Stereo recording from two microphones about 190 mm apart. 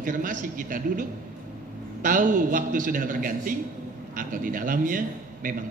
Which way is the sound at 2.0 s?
45° right (ahead or behind).